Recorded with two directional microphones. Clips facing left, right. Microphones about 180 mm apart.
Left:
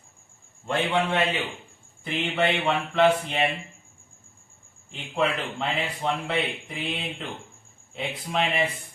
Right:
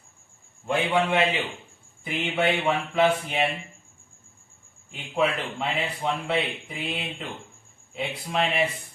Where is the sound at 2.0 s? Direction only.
10° right (ahead or behind).